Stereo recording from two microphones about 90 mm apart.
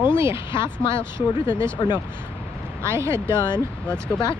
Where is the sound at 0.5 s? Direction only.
60° left (ahead or behind).